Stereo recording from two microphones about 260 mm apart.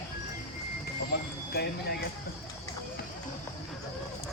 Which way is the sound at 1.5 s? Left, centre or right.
Left.